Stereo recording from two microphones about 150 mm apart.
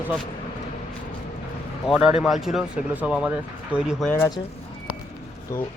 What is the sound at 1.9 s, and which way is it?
Speech, 5° right (ahead or behind).